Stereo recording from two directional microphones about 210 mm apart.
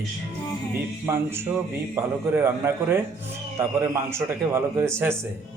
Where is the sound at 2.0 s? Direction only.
10° right (ahead or behind).